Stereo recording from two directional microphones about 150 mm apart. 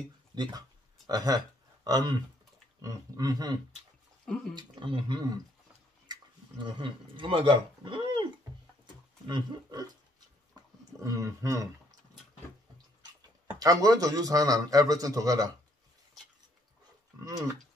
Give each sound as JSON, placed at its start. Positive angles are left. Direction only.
{"t": 0.3, "sound": "a man's voice", "side_deg": -25}
{"t": 4.6, "sound": "speech", "side_deg": -30}
{"t": 6.6, "sound": "speech", "side_deg": -35}
{"t": 9.3, "sound": "a man's voice", "side_deg": -25}
{"t": 10.9, "sound": "a man's voice", "side_deg": -20}
{"t": 13.6, "sound": "a man's voice", "side_deg": -25}